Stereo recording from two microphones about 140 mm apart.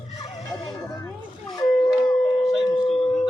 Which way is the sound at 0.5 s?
25° left (ahead or behind).